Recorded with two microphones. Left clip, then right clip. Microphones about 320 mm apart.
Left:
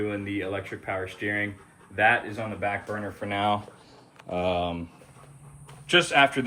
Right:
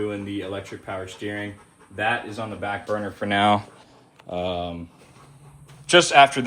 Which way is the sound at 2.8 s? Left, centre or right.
Right.